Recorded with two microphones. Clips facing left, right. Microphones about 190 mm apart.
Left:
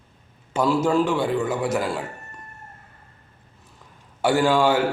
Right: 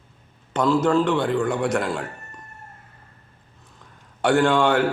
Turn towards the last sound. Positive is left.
turn(degrees=5)  # may be behind; listen again after turning